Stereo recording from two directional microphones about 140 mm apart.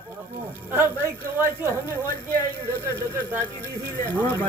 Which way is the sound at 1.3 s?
15° right (ahead or behind).